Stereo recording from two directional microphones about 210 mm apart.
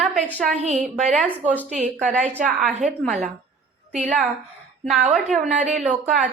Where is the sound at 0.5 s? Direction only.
30° right (ahead or behind).